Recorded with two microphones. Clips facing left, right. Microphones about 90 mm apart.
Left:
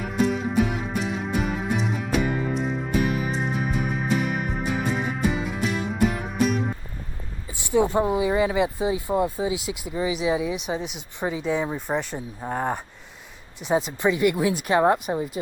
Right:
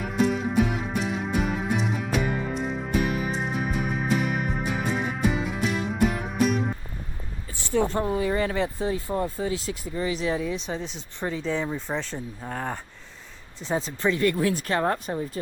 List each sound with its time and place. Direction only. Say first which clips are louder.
0.0 s music: even; centre (ahead or behind)
7.6 s speech: left 4 dB; 15° left (ahead or behind)